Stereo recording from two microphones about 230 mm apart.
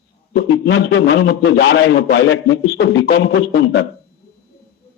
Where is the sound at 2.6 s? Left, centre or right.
Left.